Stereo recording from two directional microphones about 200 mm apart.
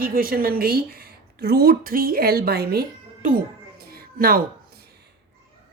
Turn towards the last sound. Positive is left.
turn(degrees=-45)  # may be behind; listen again after turning